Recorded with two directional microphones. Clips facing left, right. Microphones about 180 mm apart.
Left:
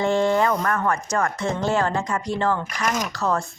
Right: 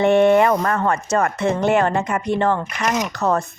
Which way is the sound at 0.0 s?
65° right (ahead or behind).